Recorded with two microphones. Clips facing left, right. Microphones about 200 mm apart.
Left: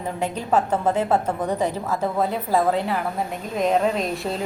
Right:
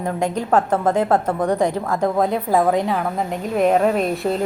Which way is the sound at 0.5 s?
10° left (ahead or behind).